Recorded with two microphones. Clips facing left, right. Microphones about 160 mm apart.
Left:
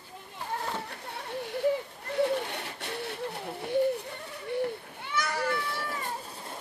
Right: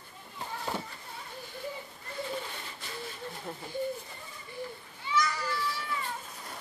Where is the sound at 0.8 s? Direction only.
70° left (ahead or behind).